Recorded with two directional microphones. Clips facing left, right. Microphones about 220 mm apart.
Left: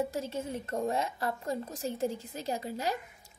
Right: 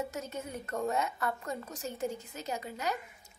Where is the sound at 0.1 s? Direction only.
30° left (ahead or behind).